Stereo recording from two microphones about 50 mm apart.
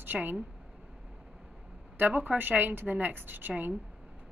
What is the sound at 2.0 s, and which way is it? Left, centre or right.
A woman's voice, right.